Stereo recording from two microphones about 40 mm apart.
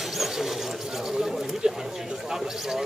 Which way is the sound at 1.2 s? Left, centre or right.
Centre.